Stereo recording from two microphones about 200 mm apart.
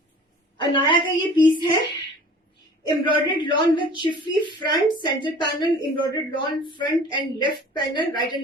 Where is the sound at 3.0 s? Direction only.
25° left (ahead or behind).